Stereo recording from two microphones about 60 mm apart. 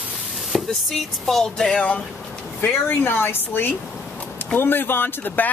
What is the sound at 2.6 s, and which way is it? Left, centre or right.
Speech, left.